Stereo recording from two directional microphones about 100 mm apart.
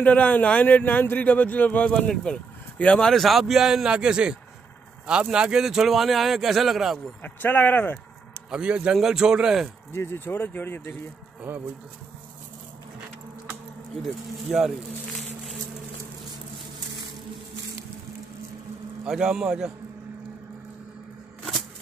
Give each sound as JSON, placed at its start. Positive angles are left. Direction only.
{"t": 0.0, "sound": "a man's voice", "side_deg": 15}
{"t": 7.2, "sound": "speech", "side_deg": 20}
{"t": 8.5, "sound": "a man's voice", "side_deg": -10}
{"t": 9.9, "sound": "speech", "side_deg": 25}
{"t": 14.0, "sound": "a man's voice", "side_deg": -5}
{"t": 19.0, "sound": "a man's voice", "side_deg": -5}